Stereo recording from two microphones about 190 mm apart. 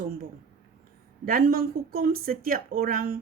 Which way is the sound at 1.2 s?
50° right (ahead or behind).